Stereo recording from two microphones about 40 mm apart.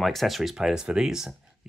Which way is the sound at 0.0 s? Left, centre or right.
Centre.